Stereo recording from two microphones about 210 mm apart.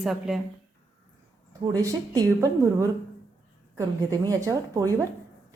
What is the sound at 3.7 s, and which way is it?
A woman's voice, 15° right (ahead or behind).